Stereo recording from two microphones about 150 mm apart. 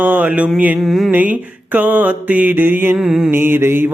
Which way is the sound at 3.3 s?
15° right (ahead or behind).